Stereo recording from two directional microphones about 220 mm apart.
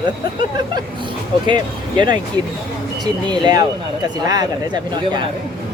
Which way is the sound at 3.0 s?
20° right (ahead or behind).